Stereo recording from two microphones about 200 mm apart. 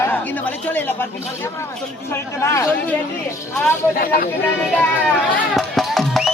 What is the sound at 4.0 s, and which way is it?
Speech, 45° left (ahead or behind).